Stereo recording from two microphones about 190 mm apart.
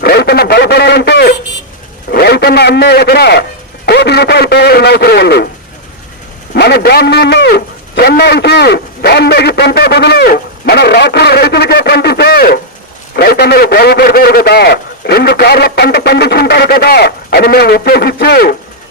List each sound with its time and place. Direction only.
0.0 s a man's voice: 55° left (ahead or behind)
6.5 s a man's voice: 60° left (ahead or behind)